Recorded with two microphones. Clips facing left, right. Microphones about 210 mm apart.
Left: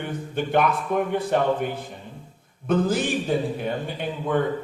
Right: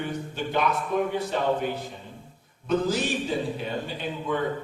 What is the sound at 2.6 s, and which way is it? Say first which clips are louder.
A man's voice: left 3 dB; 55° left (ahead or behind).